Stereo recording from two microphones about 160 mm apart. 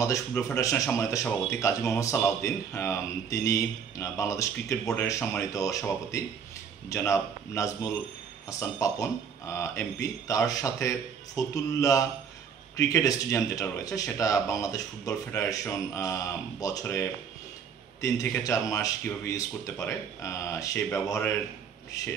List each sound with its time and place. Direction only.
0.0 s speech: 20° left (ahead or behind)